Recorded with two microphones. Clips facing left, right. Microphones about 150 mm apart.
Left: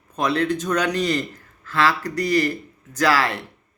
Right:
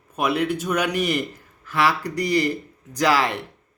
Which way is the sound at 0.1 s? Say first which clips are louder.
Left 1 dB; 10° right (ahead or behind).